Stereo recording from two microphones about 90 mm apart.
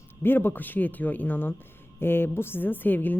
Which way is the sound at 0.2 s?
25° left (ahead or behind).